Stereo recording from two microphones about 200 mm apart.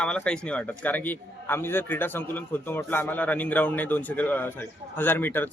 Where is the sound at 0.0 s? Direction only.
5° left (ahead or behind).